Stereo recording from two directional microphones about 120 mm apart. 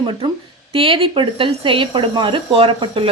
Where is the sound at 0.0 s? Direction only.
45° right (ahead or behind).